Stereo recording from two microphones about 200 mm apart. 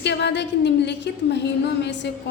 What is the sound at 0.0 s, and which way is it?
A woman's voice, 60° left (ahead or behind).